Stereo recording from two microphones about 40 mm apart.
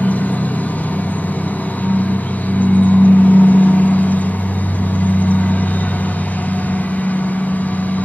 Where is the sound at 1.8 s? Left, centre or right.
Left.